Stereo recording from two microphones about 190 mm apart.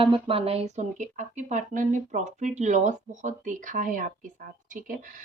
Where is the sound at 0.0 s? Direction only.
30° right (ahead or behind).